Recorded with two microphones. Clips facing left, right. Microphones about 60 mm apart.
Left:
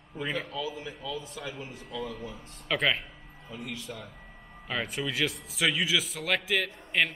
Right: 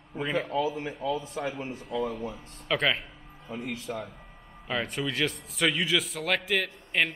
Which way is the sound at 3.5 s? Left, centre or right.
Right.